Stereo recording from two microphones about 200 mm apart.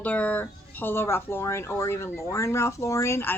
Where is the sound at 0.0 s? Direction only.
5° left (ahead or behind).